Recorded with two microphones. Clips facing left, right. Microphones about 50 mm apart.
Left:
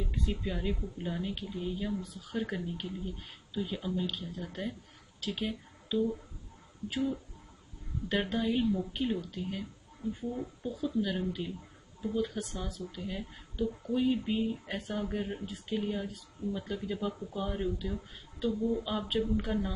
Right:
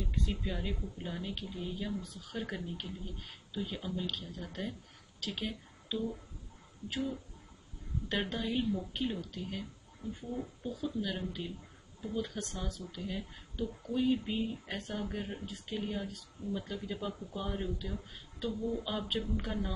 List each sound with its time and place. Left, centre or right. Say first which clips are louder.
0.0 s speech: left 2 dB; centre